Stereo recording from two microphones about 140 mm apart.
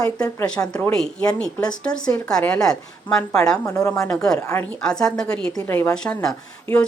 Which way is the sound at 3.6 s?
20° left (ahead or behind).